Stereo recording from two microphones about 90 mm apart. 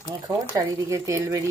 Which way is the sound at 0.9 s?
35° right (ahead or behind).